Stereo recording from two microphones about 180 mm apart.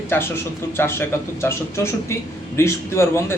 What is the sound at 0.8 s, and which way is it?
Speech, 15° left (ahead or behind).